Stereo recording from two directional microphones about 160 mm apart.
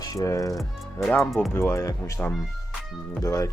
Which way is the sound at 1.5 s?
15° left (ahead or behind).